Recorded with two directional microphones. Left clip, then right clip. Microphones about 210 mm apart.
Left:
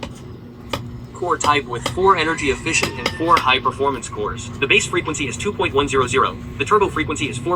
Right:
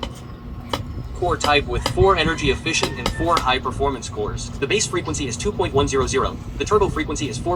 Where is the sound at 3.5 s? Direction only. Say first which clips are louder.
Left 4 dB; 20° right (ahead or behind).